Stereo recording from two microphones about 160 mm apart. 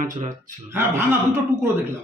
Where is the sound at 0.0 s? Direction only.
55° right (ahead or behind).